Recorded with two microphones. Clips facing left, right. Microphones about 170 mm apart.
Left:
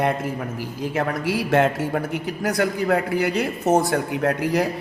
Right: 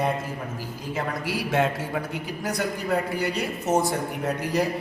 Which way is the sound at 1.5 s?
65° left (ahead or behind).